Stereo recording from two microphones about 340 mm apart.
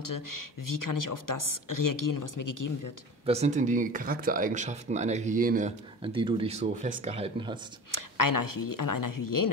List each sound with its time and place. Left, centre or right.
0.0 s speech: left
3.3 s speech: centre
7.9 s speech: left